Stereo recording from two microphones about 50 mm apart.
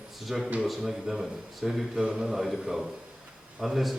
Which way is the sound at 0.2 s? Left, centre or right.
Centre.